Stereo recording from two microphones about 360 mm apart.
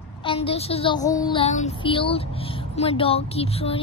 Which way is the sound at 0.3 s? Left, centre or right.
Centre.